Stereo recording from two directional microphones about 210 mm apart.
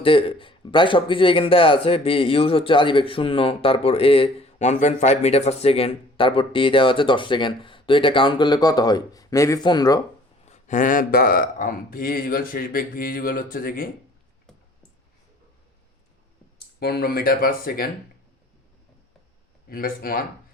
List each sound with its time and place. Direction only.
0.0 s speech: 25° left (ahead or behind)
10.5 s speech: 35° left (ahead or behind)
16.8 s speech: 45° left (ahead or behind)
19.6 s speech: 45° left (ahead or behind)